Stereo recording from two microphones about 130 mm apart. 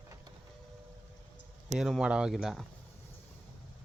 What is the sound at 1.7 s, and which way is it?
Speech, centre (ahead or behind).